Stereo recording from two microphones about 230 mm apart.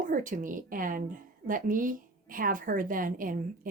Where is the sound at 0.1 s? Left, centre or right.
Right.